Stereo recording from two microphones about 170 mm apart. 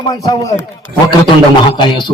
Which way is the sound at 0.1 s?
20° left (ahead or behind).